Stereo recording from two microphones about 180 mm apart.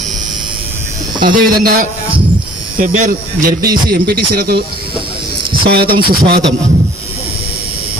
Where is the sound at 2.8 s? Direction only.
45° right (ahead or behind).